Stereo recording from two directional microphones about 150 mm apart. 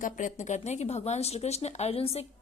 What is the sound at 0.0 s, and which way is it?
A woman's voice, 55° left (ahead or behind).